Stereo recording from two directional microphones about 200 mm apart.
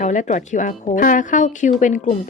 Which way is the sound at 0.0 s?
40° left (ahead or behind).